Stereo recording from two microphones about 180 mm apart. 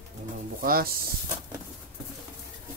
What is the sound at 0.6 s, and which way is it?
Speech, 55° right (ahead or behind).